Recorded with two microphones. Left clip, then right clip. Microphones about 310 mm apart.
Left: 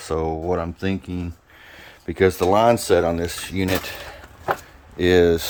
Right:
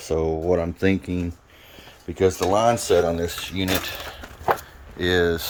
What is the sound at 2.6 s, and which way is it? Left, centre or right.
Speech, left.